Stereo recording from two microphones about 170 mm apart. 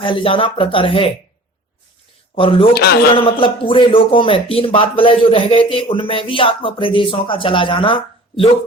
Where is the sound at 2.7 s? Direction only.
70° left (ahead or behind).